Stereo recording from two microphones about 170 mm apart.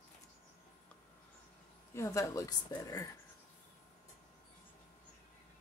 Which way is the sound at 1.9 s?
15° left (ahead or behind).